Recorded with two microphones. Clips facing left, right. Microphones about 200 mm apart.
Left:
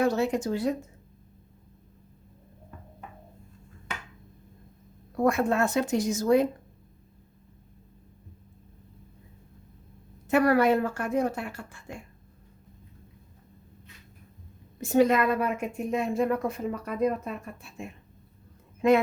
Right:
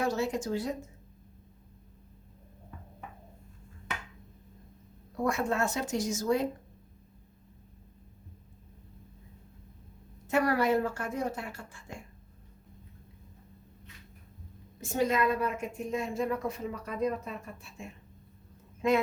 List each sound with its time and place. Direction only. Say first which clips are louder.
0.0 s a woman's voice: left 5 dB; 60° left (ahead or behind)
5.2 s a woman's voice: left 5 dB; 60° left (ahead or behind)
10.2 s a woman's voice: left 5 dB; 65° left (ahead or behind)
14.8 s a woman's voice: left 6 dB; 60° left (ahead or behind)